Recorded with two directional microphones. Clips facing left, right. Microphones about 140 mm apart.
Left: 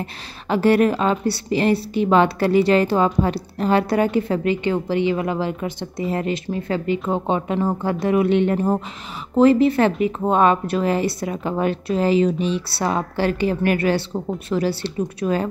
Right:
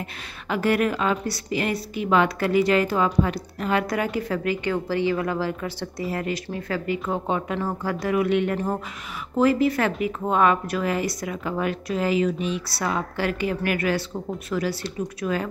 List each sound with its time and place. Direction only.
0.0 s a woman's voice: 30° left (ahead or behind)